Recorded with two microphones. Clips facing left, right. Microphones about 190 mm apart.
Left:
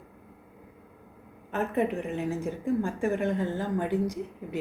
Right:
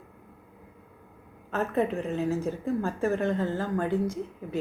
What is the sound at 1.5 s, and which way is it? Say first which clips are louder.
Speech: even; 15° left (ahead or behind).